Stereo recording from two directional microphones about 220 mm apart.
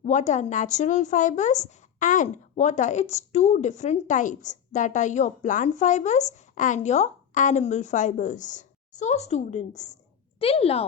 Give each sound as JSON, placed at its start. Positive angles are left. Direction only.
{"t": 0.0, "sound": "a woman's voice", "side_deg": 30}